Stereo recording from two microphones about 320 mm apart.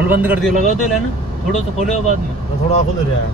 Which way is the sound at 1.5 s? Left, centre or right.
Left.